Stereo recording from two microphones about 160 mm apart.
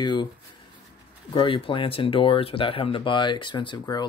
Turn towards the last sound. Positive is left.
turn(degrees=30)  # may be behind; listen again after turning